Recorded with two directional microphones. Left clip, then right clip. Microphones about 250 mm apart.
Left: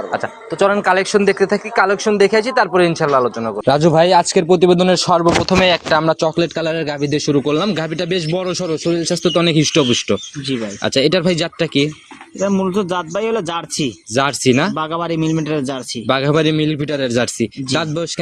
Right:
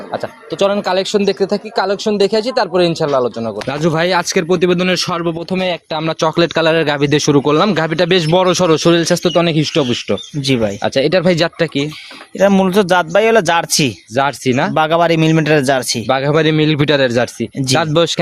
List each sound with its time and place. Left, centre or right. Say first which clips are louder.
0.6 s speech: left 1 dB; centre
5.2 s speech: left 5 dB; centre
9.2 s speech: right 1 dB; centre
12.4 s speech: right 6 dB; right
14.2 s speech: even; centre
14.8 s speech: right 8 dB; right
16.0 s speech: left 1 dB; centre
16.3 s speech: right 3 dB; centre
17.2 s speech: right 2 dB; centre